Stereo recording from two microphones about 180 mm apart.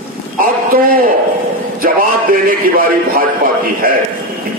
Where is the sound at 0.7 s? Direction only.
55° right (ahead or behind).